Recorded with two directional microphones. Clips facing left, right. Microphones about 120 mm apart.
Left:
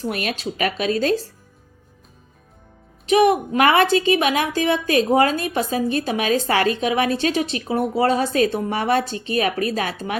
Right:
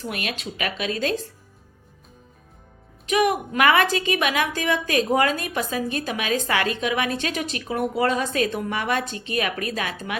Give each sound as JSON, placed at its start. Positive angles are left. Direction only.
{"t": 0.0, "sound": "a woman's voice", "side_deg": 40}
{"t": 3.1, "sound": "a woman's voice", "side_deg": 30}